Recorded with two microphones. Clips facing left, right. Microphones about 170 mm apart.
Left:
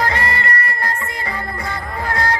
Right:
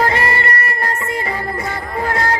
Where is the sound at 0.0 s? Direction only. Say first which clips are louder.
Right 3 dB; 25° right (ahead or behind).